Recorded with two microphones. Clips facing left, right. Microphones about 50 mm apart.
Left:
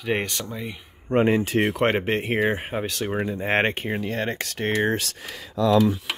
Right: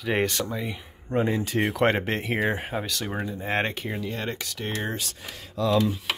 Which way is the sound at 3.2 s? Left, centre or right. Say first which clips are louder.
Left 4 dB; left.